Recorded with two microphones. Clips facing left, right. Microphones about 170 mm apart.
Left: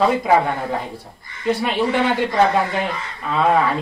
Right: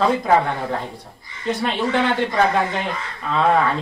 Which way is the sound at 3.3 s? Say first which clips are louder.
Left 1 dB; 5° left (ahead or behind).